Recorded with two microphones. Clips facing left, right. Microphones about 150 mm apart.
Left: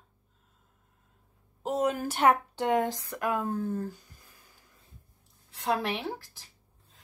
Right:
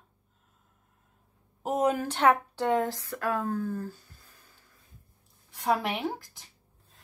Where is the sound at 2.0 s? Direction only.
10° left (ahead or behind).